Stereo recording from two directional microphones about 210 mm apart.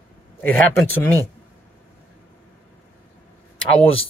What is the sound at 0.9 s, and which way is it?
Speech, 10° left (ahead or behind).